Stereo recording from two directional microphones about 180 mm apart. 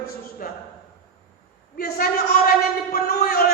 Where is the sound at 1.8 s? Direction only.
55° left (ahead or behind).